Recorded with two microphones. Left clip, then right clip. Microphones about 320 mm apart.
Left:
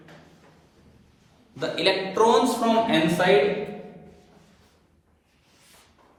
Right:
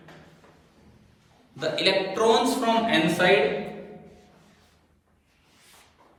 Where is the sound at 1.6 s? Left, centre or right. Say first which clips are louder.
Even; centre.